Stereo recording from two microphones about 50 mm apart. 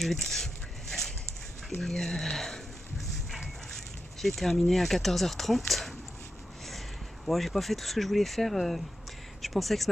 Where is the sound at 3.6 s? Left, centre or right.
Centre.